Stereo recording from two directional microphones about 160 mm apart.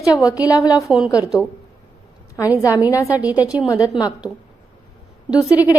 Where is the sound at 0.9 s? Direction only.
Centre (ahead or behind).